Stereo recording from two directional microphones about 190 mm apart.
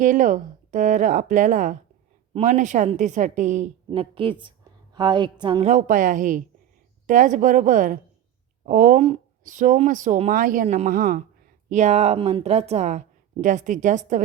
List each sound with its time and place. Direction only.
0.0 s speech: 45° right (ahead or behind)
3.8 s a woman's voice: 30° right (ahead or behind); by 9.0 s 45° right (ahead or behind)
9.0 s speech: 35° right (ahead or behind)